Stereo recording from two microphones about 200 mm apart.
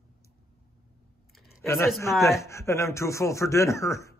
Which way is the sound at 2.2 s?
15° left (ahead or behind).